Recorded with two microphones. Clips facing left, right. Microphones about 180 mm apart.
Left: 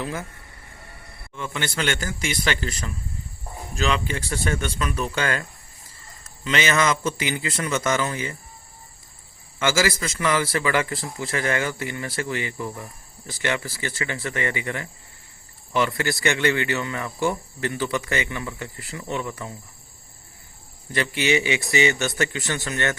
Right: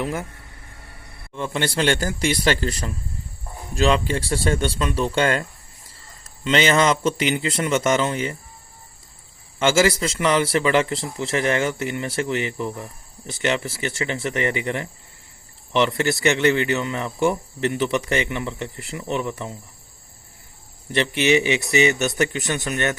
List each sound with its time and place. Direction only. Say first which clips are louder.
1.4 s a man's voice: right 5 dB; 35° right (ahead or behind)
9.7 s speech: right 5 dB; 25° right (ahead or behind)
16.5 s speech: right 4 dB; 20° right (ahead or behind)
20.9 s speech: right 4 dB; 20° right (ahead or behind)